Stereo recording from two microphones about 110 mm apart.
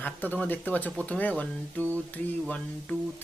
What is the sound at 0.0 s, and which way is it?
Speech, 15° left (ahead or behind).